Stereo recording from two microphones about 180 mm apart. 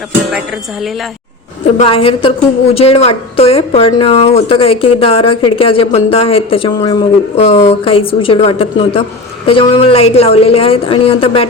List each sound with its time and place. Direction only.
1.8 s speech: 30° left (ahead or behind)
7.3 s speech: 35° left (ahead or behind)